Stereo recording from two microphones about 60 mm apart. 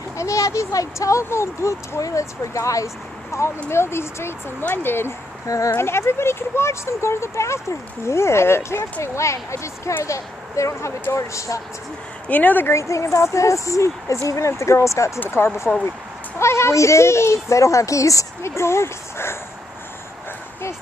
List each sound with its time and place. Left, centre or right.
0.2 s speech: left
12.3 s speech: left
12.7 s speech: left
15.2 s speech: left